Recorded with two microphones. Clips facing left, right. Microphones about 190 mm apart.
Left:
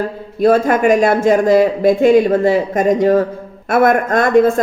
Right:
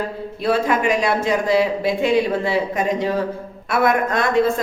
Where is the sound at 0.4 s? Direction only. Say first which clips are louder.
Left 7 dB; 45° left (ahead or behind).